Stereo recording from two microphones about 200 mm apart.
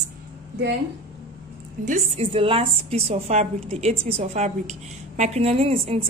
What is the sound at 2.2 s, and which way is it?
A woman's voice, 25° right (ahead or behind).